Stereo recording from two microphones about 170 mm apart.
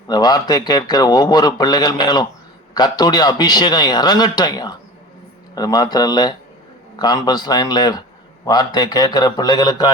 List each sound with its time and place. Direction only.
0.1 s speech: 25° left (ahead or behind)